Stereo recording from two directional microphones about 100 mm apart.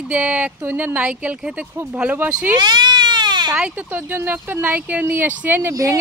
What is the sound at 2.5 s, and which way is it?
Baby cry, 45° right (ahead or behind).